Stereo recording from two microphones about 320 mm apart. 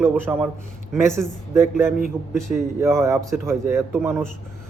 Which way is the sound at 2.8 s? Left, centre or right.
Centre.